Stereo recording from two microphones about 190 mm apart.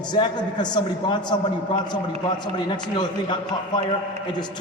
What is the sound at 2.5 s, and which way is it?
A man's voice, 25° left (ahead or behind).